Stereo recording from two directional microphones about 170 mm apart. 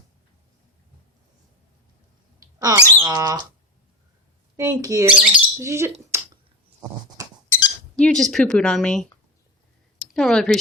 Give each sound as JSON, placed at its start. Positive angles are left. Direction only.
{"t": 2.4, "sound": "a sound", "side_deg": -20}
{"t": 3.1, "sound": "speech", "side_deg": -25}
{"t": 4.5, "sound": "speech", "side_deg": -20}
{"t": 6.1, "sound": "a sound", "side_deg": -15}
{"t": 7.9, "sound": "speech", "side_deg": 5}
{"t": 10.2, "sound": "speech", "side_deg": 5}